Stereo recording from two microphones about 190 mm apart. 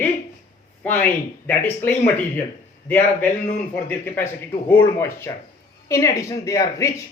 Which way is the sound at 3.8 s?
10° left (ahead or behind).